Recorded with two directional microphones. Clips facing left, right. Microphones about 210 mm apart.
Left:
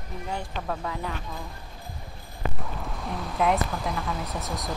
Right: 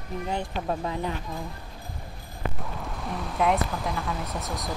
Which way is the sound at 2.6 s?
Centre (ahead or behind).